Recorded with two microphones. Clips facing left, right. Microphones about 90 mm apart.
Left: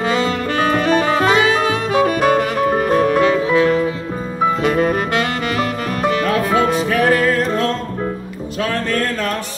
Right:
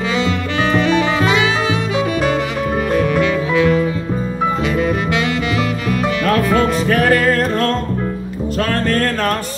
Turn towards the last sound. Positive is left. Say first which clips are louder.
# right 1 dB
turn(degrees=-60)  # may be behind; listen again after turning